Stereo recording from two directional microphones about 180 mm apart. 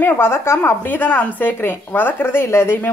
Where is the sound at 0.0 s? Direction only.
10° left (ahead or behind).